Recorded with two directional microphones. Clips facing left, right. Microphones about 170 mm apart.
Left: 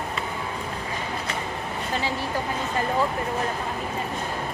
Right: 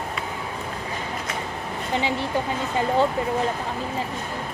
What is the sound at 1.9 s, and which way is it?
Speech, 20° right (ahead or behind).